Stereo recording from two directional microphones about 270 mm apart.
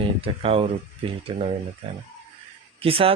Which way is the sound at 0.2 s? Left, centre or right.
Right.